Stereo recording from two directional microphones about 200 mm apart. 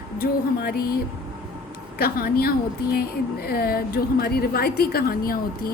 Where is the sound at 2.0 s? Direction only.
50° left (ahead or behind).